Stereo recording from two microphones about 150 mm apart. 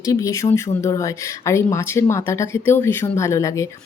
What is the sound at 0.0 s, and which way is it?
Speech, 20° left (ahead or behind).